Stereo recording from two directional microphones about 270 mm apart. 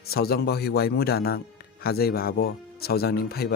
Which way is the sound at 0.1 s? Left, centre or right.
Left.